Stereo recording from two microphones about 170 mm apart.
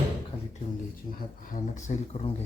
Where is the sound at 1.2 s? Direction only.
50° left (ahead or behind).